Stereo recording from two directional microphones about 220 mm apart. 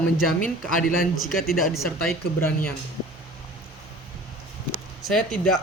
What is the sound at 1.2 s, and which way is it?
Speech, centre (ahead or behind).